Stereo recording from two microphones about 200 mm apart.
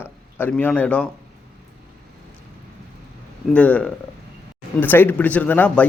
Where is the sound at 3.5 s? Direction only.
5° left (ahead or behind).